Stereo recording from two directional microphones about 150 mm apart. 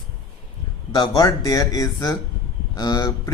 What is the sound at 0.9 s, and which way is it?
Speech, 25° left (ahead or behind).